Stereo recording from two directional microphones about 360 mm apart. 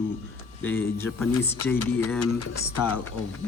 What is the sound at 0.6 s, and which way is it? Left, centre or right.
Speech, centre.